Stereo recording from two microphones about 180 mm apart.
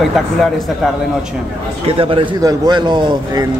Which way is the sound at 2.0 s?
25° right (ahead or behind).